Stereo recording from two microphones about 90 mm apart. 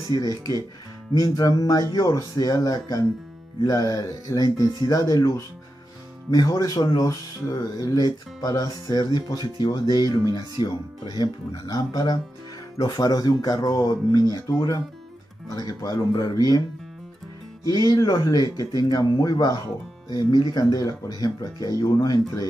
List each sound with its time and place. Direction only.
0.1 s speech: 50° left (ahead or behind)
6.3 s speech: 45° left (ahead or behind)
17.6 s speech: 45° left (ahead or behind)